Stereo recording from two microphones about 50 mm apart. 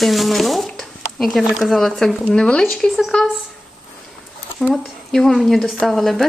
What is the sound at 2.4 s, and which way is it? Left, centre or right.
Speech, centre.